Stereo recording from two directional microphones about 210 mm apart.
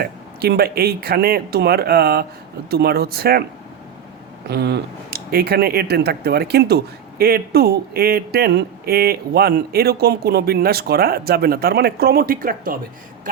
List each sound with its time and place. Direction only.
0.0 s speech: 50° right (ahead or behind)
4.4 s speech: 50° right (ahead or behind)